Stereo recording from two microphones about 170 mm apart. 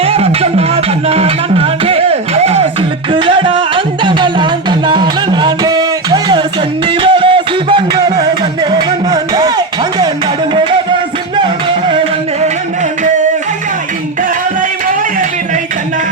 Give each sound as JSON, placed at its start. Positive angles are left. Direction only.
{"t": 0.0, "sound": "music", "side_deg": -35}